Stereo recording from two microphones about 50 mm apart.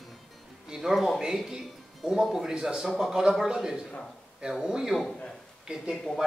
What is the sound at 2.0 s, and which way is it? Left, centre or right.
A man's voice, centre.